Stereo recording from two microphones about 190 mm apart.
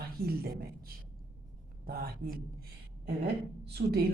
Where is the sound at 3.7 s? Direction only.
55° right (ahead or behind).